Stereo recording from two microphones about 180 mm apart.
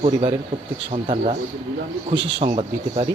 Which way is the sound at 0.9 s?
35° right (ahead or behind).